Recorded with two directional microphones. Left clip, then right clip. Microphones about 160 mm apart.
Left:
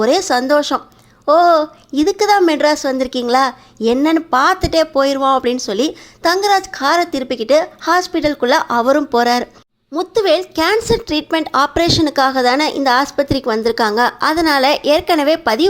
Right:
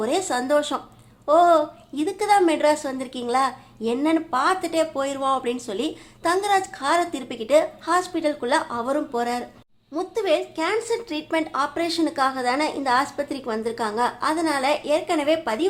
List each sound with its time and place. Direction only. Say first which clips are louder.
0.0 s speech: left 10 dB; 40° left (ahead or behind)
9.9 s speech: left 8 dB; 35° left (ahead or behind)